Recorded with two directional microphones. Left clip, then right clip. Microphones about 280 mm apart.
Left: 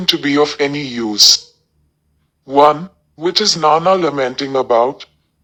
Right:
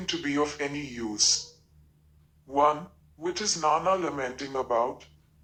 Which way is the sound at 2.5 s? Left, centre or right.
Left.